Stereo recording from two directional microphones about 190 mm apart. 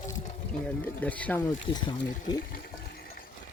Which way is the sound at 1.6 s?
25° left (ahead or behind).